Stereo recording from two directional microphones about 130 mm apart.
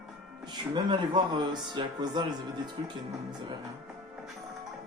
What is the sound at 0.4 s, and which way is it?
Speech, 35° right (ahead or behind).